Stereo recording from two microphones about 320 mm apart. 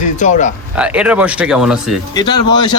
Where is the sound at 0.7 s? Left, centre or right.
Centre.